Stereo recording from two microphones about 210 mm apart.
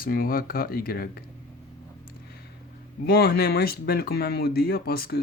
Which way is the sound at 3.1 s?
50° left (ahead or behind).